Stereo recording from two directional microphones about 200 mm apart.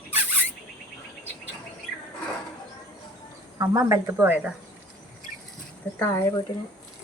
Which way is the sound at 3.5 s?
15° right (ahead or behind).